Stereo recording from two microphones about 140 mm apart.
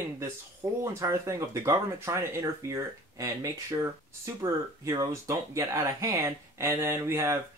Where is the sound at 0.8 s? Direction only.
20° right (ahead or behind).